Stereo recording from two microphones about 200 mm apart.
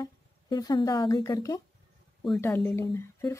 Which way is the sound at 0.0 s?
20° left (ahead or behind).